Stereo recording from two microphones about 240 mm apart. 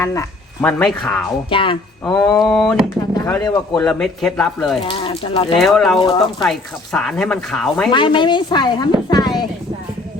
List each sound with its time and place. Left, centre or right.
0.0 s speech: centre
1.5 s speech: left
2.4 s speech: centre
3.2 s speech: centre
3.8 s speech: centre
4.9 s speech: left
5.5 s speech: centre
6.0 s speech: centre
6.4 s speech: centre
7.9 s speech: centre